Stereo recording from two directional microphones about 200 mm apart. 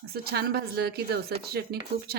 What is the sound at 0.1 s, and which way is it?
Speech, 50° right (ahead or behind).